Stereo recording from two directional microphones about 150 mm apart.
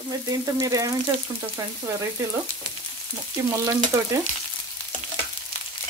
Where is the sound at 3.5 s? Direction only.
20° right (ahead or behind).